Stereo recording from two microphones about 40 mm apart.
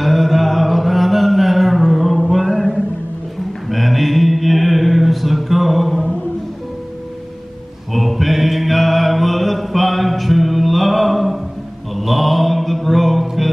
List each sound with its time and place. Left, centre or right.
0.0 s a sound: centre
3.6 s mantra: centre
7.9 s music: centre
11.9 s mantra: centre